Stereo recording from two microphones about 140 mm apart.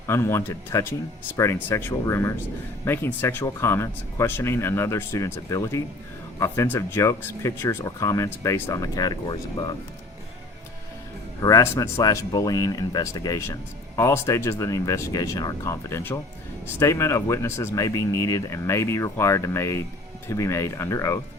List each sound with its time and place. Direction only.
0.1 s speech: 20° left (ahead or behind)
11.3 s speech: 25° left (ahead or behind)